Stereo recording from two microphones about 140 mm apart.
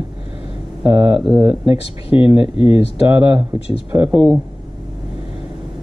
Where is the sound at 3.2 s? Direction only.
30° right (ahead or behind).